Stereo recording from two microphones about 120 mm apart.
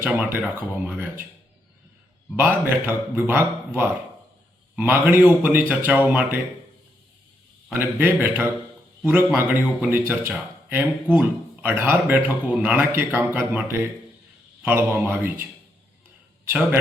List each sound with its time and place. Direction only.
0.0 s speech: 15° right (ahead or behind)
2.3 s speech: 20° right (ahead or behind)
7.7 s speech: 15° right (ahead or behind)